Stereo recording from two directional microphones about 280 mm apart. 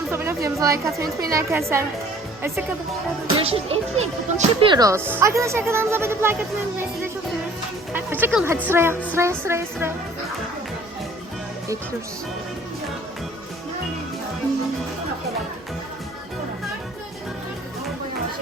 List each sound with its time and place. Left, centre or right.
0.1 s a sound: centre
0.9 s a woman's voice: centre
3.3 s a child's voice: centre
7.9 s a woman's voice: centre